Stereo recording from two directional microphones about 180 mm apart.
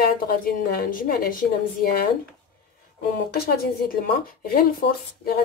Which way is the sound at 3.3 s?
60° left (ahead or behind).